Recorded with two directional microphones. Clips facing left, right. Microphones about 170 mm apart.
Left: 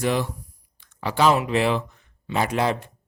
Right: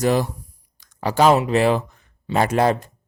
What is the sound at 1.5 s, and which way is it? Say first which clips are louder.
Speech: right 4 dB; 40° right (ahead or behind).